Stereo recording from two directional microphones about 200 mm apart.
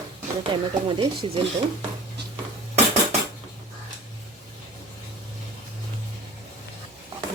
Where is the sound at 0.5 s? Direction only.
25° right (ahead or behind).